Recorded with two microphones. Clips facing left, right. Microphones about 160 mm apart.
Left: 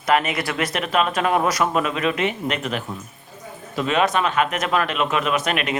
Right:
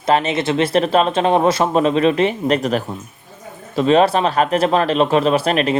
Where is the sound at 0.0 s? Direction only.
30° right (ahead or behind).